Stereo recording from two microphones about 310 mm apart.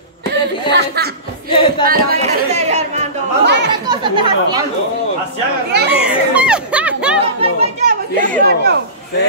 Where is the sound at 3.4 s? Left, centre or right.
Right.